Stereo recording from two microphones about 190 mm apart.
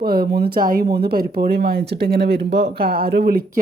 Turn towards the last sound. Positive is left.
turn(degrees=-50)  # may be behind; listen again after turning